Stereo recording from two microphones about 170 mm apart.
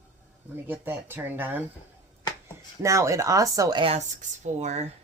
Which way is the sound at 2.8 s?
15° right (ahead or behind).